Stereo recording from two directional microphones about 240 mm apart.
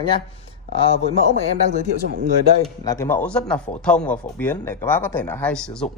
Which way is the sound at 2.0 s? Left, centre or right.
Right.